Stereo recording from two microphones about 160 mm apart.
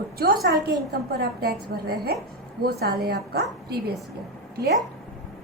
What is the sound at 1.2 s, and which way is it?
A woman's voice, 75° right (ahead or behind).